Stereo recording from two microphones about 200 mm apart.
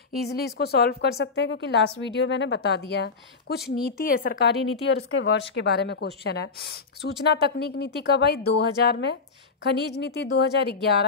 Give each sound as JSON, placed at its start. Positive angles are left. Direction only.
{"t": 0.6, "sound": "a woman's voice", "side_deg": 50}